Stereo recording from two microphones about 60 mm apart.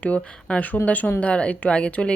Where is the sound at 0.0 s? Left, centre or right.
Left.